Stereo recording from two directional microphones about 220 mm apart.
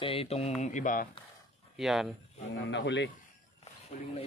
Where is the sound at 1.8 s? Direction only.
Centre (ahead or behind).